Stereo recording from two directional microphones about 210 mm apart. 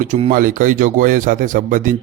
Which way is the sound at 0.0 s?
35° right (ahead or behind).